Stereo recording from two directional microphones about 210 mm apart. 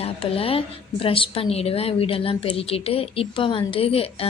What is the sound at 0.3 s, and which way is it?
A woman's voice, 25° left (ahead or behind).